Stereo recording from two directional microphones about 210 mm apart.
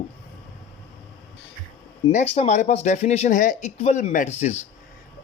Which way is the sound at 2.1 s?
35° left (ahead or behind).